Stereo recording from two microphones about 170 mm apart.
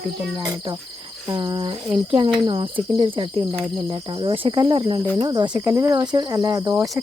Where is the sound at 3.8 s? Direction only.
30° right (ahead or behind).